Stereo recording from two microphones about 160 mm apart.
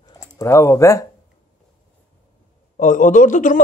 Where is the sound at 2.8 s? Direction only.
50° left (ahead or behind).